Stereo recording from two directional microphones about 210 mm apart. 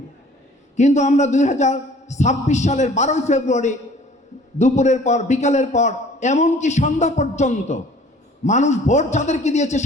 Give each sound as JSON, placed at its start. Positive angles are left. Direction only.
{"t": 0.8, "sound": "a man's voice", "side_deg": 35}